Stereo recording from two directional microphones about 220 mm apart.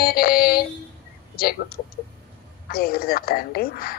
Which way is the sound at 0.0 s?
45° left (ahead or behind).